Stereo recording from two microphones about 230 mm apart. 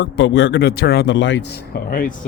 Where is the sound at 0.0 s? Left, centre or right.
Left.